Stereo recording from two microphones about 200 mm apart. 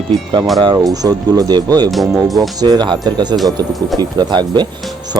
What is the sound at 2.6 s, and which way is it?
Speech, 20° right (ahead or behind).